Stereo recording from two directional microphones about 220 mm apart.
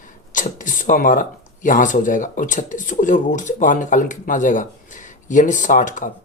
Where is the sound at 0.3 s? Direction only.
35° left (ahead or behind).